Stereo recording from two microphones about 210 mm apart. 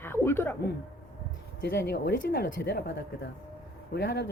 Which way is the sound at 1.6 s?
55° left (ahead or behind).